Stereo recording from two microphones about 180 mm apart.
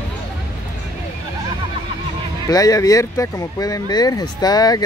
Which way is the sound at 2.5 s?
20° left (ahead or behind).